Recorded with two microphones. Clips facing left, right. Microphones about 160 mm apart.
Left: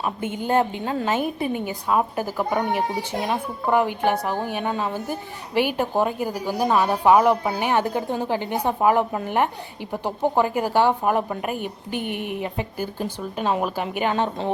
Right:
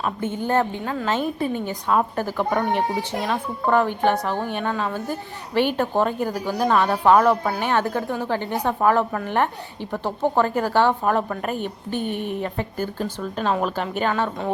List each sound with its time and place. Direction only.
0.0 s a woman's voice: 10° left (ahead or behind)